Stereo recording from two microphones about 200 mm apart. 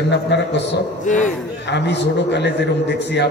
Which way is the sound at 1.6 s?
60° left (ahead or behind).